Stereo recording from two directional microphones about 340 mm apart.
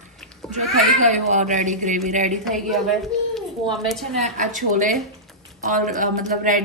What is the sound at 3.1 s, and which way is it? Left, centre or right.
Speech, centre.